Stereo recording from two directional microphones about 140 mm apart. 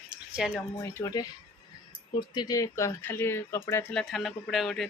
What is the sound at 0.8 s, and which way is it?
Speech, 20° left (ahead or behind).